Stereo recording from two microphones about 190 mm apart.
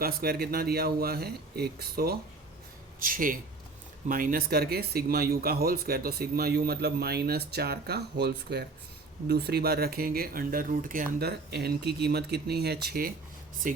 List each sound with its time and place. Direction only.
0.0 s speech: 55° right (ahead or behind)